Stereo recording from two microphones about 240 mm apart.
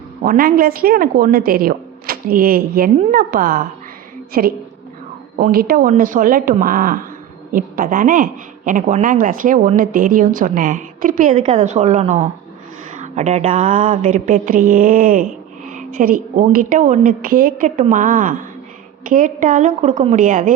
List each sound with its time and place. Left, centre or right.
0.2 s speech: right
15.7 s a sound: right
16.3 s speech: right